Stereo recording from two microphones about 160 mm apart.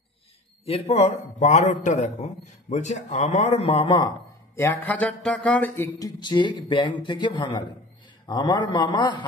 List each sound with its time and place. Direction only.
0.7 s a man's voice: 40° left (ahead or behind)
4.6 s speech: 10° left (ahead or behind)
5.9 s speech: 25° left (ahead or behind)